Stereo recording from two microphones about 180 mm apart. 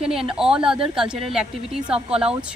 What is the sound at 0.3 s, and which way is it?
A woman's voice, 5° right (ahead or behind).